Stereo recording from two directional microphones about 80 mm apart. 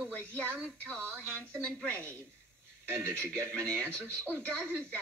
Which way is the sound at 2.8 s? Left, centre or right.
Right.